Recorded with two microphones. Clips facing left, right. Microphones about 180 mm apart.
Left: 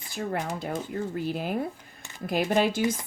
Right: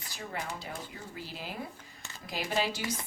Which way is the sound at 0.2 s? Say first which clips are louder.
Left 9 dB; 50° left (ahead or behind).